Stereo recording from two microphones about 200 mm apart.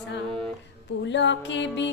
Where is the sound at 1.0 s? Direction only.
65° left (ahead or behind).